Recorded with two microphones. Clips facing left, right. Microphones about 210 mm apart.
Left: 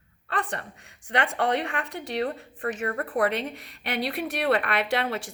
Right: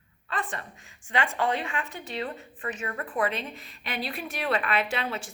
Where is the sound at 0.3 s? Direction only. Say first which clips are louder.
Left 3 dB; 65° left (ahead or behind).